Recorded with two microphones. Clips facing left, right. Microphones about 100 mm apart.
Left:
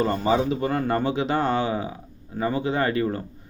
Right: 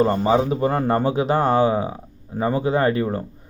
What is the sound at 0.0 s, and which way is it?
A man's voice, 30° right (ahead or behind).